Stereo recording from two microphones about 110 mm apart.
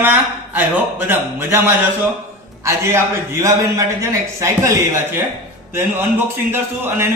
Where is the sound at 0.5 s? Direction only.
20° right (ahead or behind).